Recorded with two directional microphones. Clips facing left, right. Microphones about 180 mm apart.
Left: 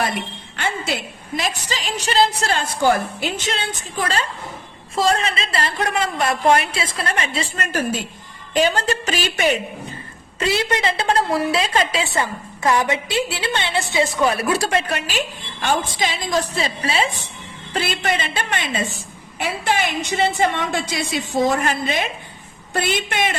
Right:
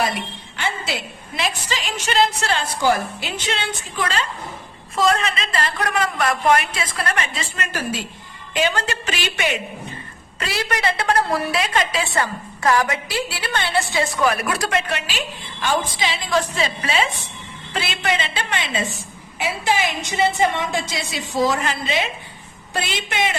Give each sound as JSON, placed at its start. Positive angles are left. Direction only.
{"t": 0.5, "sound": "a sound", "side_deg": 50}
{"t": 1.4, "sound": "a woman's voice", "side_deg": 40}
{"t": 10.4, "sound": "a woman's voice", "side_deg": 25}
{"t": 17.7, "sound": "a woman's voice", "side_deg": 45}
{"t": 19.4, "sound": "a woman's voice", "side_deg": 60}